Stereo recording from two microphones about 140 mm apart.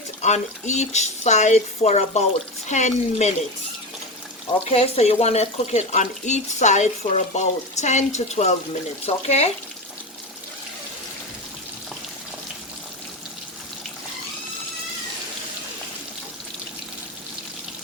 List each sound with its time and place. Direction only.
0.2 s speech: 55° left (ahead or behind)
4.7 s speech: 50° left (ahead or behind)